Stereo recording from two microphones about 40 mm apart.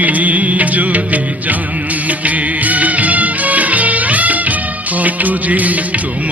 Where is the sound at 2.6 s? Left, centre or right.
Right.